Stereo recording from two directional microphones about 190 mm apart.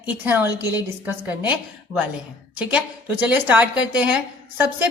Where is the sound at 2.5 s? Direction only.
10° right (ahead or behind).